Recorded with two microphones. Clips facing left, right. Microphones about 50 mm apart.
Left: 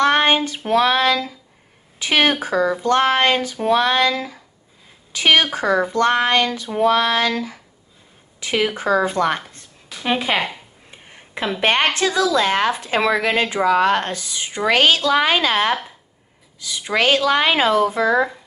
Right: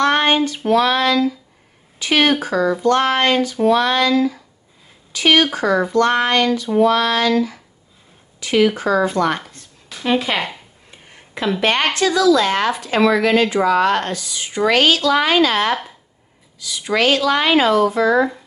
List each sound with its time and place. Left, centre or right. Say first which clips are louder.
0.0 s child singing: even; left
0.7 s a woman's voice: even; left
10.9 s a sound: even; left
11.6 s speech: even; left